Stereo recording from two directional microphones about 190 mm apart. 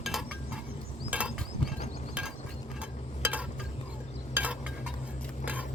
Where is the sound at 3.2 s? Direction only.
10° right (ahead or behind).